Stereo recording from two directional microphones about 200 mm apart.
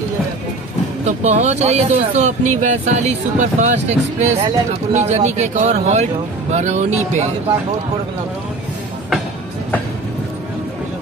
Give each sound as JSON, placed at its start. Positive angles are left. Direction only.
{"t": 1.0, "sound": "speech", "side_deg": -35}